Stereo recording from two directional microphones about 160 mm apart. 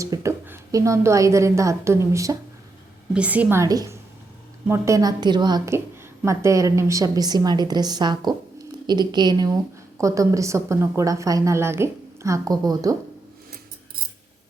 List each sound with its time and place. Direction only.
0.0 s a woman's voice: 20° right (ahead or behind)